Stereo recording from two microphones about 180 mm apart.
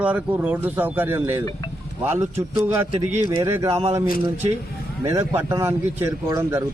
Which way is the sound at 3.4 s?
15° right (ahead or behind).